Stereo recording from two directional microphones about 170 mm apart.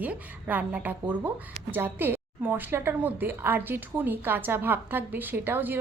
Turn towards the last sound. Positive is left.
turn(degrees=-10)  # may be behind; listen again after turning